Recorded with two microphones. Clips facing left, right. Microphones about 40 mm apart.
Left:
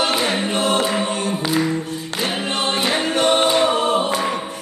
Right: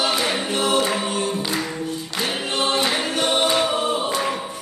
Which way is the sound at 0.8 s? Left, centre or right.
Centre.